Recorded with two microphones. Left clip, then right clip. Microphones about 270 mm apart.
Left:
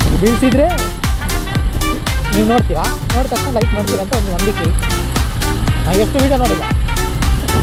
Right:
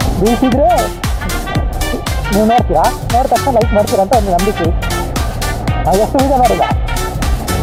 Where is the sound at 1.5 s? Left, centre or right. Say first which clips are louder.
Right 1 dB; centre.